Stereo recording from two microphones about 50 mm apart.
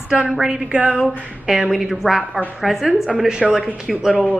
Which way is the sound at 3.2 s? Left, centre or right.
Centre.